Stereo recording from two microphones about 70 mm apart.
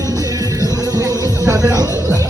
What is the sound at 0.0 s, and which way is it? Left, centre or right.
Music, right.